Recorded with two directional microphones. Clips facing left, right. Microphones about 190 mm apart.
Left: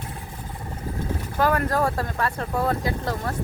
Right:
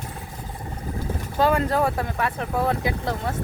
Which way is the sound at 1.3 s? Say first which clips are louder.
Right 2 dB; 20° right (ahead or behind).